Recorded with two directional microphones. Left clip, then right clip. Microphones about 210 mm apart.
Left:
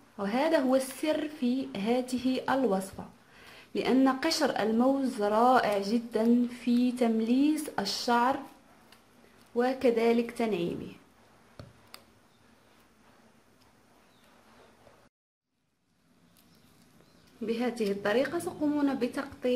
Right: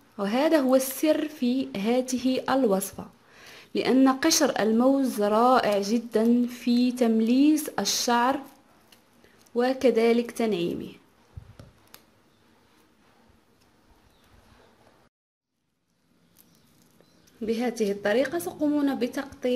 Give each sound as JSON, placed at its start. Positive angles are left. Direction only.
{"t": 0.1, "sound": "speech", "side_deg": -30}
{"t": 9.6, "sound": "speech", "side_deg": -30}
{"t": 17.4, "sound": "speech", "side_deg": -25}